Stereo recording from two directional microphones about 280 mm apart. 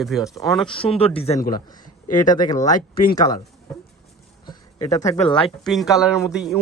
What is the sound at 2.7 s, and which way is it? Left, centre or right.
Speech, left.